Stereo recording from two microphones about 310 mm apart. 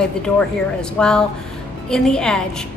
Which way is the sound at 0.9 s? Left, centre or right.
Centre.